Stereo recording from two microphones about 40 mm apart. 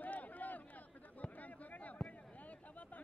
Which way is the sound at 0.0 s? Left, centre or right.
Left.